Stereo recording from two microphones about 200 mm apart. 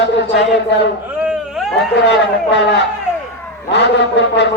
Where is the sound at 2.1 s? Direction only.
60° left (ahead or behind).